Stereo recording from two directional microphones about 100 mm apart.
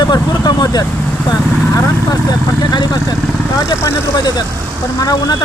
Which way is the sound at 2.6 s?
45° left (ahead or behind).